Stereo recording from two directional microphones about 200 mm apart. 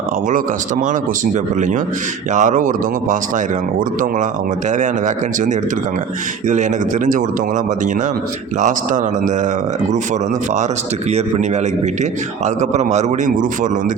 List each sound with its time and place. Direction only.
2.3 s speech: 40° right (ahead or behind)
4.8 s speech: 40° right (ahead or behind)
8.6 s speech: 40° right (ahead or behind)
12.7 s speech: 35° right (ahead or behind)